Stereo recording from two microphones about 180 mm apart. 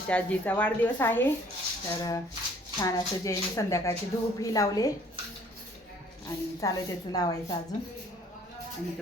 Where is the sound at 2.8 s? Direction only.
20° left (ahead or behind).